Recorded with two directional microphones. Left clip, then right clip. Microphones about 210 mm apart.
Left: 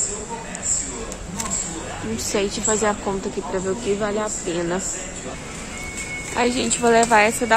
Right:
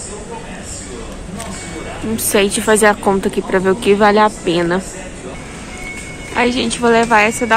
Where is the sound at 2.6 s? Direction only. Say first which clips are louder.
Right 10 dB; 15° right (ahead or behind).